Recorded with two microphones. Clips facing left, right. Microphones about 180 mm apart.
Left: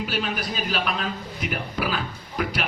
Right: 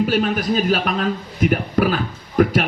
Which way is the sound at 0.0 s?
45° right (ahead or behind).